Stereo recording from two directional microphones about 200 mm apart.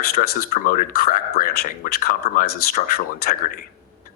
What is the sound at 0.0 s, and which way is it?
Speech, 45° left (ahead or behind).